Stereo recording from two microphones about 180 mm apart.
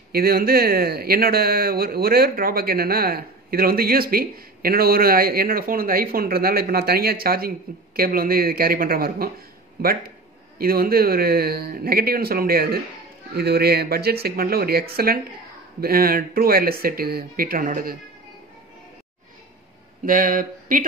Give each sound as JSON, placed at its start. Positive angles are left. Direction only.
{"t": 0.1, "sound": "speech", "side_deg": -55}
{"t": 10.6, "sound": "speech", "side_deg": -55}
{"t": 20.1, "sound": "a sound", "side_deg": -50}